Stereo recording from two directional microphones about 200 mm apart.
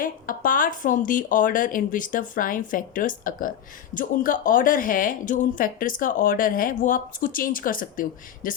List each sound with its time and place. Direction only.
0.0 s a woman's voice: 45° left (ahead or behind)